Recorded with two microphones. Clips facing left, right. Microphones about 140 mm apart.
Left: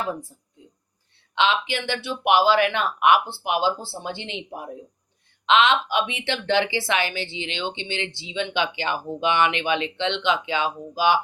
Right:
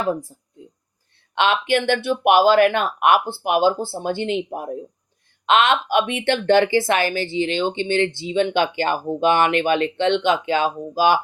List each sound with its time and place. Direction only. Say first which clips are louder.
1.4 s speech: right 4 dB; 55° right (ahead or behind)